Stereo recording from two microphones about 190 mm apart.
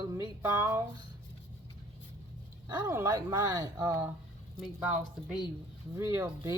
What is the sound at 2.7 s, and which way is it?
Speech, 10° right (ahead or behind).